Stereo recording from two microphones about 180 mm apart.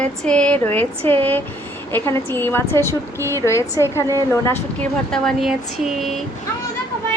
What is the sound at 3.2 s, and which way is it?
Speech, 15° right (ahead or behind).